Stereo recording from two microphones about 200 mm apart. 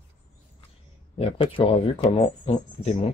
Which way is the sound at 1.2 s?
30° left (ahead or behind).